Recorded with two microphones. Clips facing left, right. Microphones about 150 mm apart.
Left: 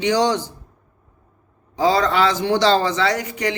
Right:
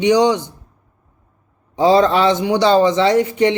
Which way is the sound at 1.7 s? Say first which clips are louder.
Right 5 dB; 25° right (ahead or behind).